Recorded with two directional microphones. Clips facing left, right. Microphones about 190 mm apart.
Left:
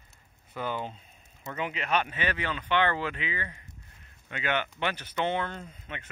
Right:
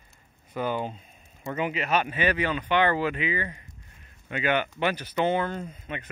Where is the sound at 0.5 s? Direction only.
15° right (ahead or behind).